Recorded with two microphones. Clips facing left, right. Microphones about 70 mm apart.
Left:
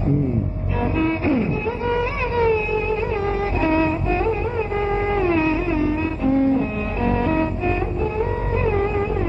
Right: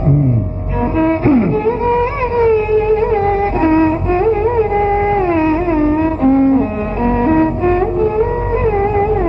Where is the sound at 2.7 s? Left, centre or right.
Right.